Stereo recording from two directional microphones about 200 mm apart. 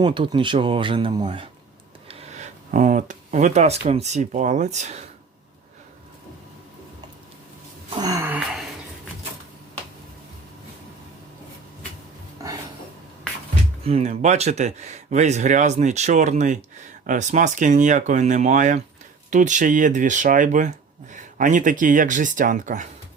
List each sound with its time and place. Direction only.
0.0 s speech: 25° right (ahead or behind)
7.9 s a sound: 20° right (ahead or behind)
13.8 s speech: 30° right (ahead or behind)